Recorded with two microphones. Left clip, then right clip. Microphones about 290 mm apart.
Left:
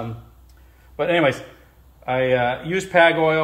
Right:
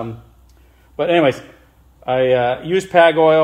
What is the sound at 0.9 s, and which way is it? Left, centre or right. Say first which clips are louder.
Speech: right 4 dB; right.